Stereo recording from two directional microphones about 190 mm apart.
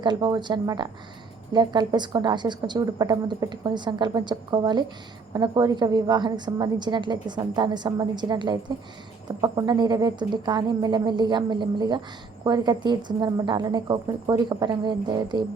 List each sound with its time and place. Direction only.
0.0 s a woman's voice: 20° right (ahead or behind)